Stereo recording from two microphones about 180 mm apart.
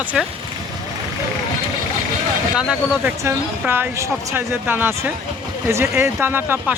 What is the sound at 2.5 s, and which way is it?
Speech, 5° right (ahead or behind).